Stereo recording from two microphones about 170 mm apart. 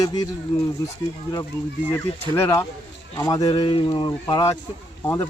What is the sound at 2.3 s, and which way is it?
Speech, 15° left (ahead or behind).